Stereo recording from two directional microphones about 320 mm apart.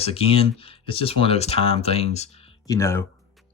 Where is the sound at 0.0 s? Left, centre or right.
Centre.